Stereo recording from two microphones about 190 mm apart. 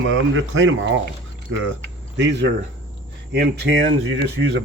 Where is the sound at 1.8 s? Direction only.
65° right (ahead or behind).